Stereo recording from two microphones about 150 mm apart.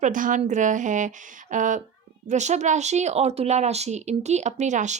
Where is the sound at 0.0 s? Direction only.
60° right (ahead or behind).